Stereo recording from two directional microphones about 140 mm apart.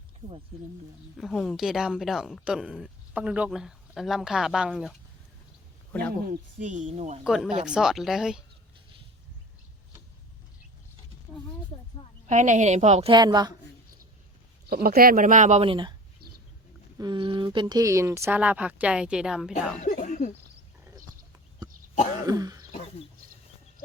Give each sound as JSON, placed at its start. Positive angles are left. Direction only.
{"t": 1.2, "sound": "speech", "side_deg": 0}
{"t": 5.9, "sound": "speech", "side_deg": 10}
{"t": 6.2, "sound": "speech", "side_deg": -60}
{"t": 7.3, "sound": "speech", "side_deg": -5}
{"t": 12.3, "sound": "speech", "side_deg": -60}
{"t": 13.1, "sound": "a woman's voice", "side_deg": -30}
{"t": 14.7, "sound": "speech", "side_deg": -90}
{"t": 15.6, "sound": "speech", "side_deg": -35}
{"t": 17.0, "sound": "speech", "side_deg": -35}
{"t": 19.8, "sound": "cough", "side_deg": 70}
{"t": 22.3, "sound": "speech", "side_deg": -30}
{"t": 22.7, "sound": "wild animals", "side_deg": 45}